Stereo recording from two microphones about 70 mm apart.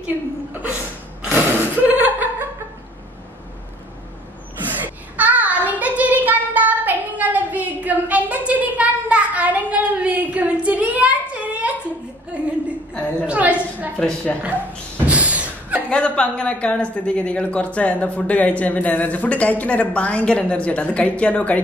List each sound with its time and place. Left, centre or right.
0.0 s a woman's voice: right
1.3 s laughter: right
4.6 s child singing: right
12.3 s a sound: centre
14.3 s speech: centre
15.0 s slam: centre
15.9 s speech: centre